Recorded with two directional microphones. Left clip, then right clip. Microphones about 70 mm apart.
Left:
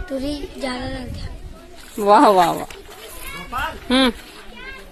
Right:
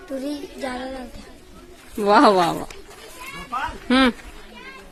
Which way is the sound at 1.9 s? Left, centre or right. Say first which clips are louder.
Left 3 dB; right.